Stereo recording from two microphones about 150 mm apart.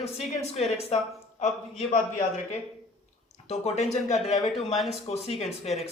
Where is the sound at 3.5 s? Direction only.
50° left (ahead or behind).